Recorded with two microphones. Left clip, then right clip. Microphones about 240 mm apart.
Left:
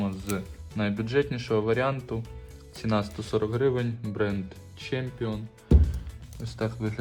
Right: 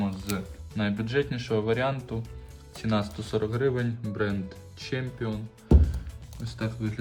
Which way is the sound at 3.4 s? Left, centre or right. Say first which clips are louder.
Left 1 dB; centre.